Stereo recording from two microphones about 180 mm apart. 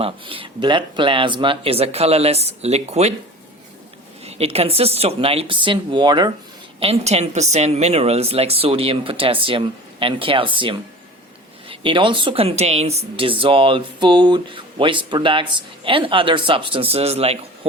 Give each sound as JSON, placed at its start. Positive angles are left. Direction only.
{"t": 0.0, "sound": "a woman's voice", "side_deg": -30}
{"t": 4.2, "sound": "a woman's voice", "side_deg": -35}